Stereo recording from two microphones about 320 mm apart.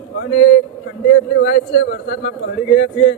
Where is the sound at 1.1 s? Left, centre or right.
Left.